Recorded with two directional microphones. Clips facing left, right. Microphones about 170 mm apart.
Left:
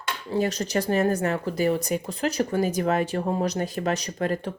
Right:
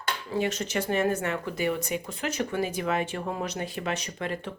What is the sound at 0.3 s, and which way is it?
Speech, 35° left (ahead or behind).